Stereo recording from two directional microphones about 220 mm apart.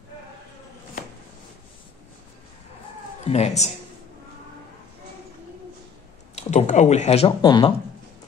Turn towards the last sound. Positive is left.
turn(degrees=20)  # may be behind; listen again after turning